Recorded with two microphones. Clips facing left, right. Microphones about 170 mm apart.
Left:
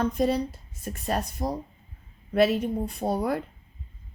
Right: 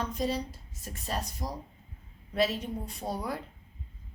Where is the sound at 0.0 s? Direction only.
55° left (ahead or behind).